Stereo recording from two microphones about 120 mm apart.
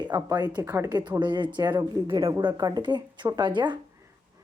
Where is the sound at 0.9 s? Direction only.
35° right (ahead or behind).